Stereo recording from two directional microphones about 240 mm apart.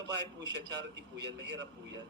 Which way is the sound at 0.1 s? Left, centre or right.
Right.